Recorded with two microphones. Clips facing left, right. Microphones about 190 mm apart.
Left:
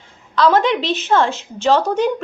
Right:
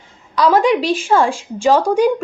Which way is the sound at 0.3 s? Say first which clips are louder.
Right 2 dB; 10° right (ahead or behind).